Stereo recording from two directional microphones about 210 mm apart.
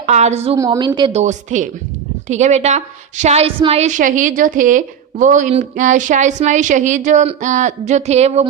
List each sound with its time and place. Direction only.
0.0 s a woman's voice: 30° right (ahead or behind)
0.5 s a woman's voice: 15° right (ahead or behind); by 8.4 s 30° right (ahead or behind)